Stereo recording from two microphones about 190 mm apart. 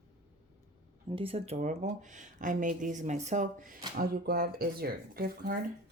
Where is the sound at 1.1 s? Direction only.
30° right (ahead or behind); by 5.6 s 50° right (ahead or behind).